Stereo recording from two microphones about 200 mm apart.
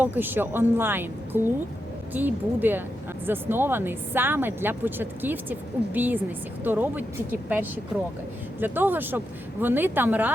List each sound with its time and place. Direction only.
0.0 s speech: 10° right (ahead or behind)